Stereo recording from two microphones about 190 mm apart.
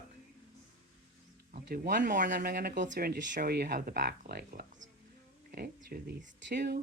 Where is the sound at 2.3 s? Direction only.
60° right (ahead or behind).